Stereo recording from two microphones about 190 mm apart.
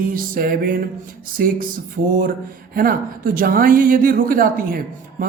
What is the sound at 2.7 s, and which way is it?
Speech, 50° right (ahead or behind).